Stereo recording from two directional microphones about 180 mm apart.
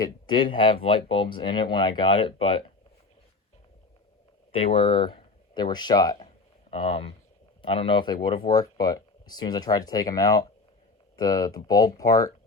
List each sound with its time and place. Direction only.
0.0 s speech: 25° left (ahead or behind)
4.5 s speech: 30° left (ahead or behind)
6.1 s a sound: 30° left (ahead or behind)
7.6 s speech: 30° left (ahead or behind)